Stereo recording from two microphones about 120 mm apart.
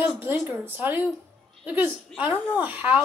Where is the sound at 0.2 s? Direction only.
15° right (ahead or behind).